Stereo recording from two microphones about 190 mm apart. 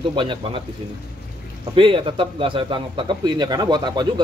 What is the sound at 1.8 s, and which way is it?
Speech, 25° right (ahead or behind).